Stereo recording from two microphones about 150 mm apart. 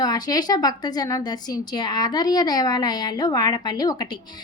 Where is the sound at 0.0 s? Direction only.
25° left (ahead or behind).